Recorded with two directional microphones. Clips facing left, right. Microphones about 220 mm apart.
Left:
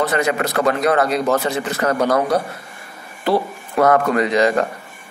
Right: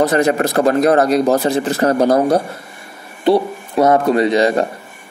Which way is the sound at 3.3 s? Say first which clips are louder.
Right 5 dB; 20° right (ahead or behind).